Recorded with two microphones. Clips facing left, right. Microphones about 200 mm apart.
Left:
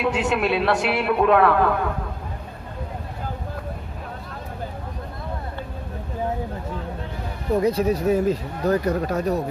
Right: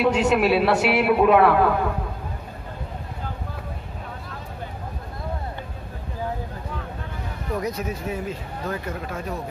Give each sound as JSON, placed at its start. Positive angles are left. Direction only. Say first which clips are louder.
{"t": 0.0, "sound": "a man's voice", "louder": "right 3 dB", "side_deg": 0}
{"t": 7.5, "sound": "speech", "louder": "left 8 dB", "side_deg": 30}